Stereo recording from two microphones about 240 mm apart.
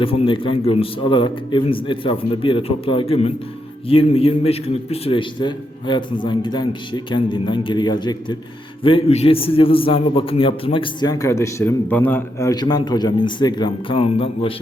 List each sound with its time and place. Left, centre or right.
0.0 s a man's voice: left